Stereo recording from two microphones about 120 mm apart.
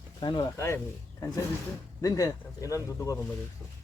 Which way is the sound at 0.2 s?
40° left (ahead or behind).